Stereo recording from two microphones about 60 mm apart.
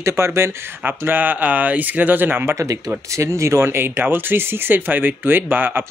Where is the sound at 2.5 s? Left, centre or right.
Right.